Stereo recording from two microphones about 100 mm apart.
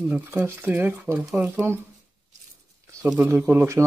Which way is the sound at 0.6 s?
15° right (ahead or behind).